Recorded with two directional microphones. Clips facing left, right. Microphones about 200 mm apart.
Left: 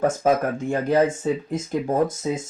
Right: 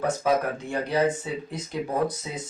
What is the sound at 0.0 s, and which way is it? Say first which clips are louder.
Speech: left 4 dB; 45° left (ahead or behind).